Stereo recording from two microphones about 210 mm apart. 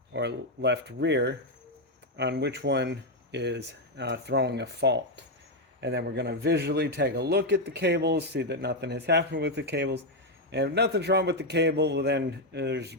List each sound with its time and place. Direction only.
0.1 s a man's voice: 55° right (ahead or behind)